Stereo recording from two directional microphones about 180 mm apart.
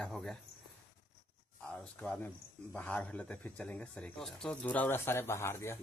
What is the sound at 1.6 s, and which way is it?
Speech, 5° left (ahead or behind).